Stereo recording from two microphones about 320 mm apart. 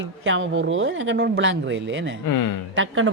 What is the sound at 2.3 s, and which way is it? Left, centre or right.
Speech, left.